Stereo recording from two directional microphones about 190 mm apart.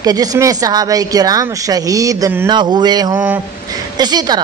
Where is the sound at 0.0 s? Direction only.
20° right (ahead or behind).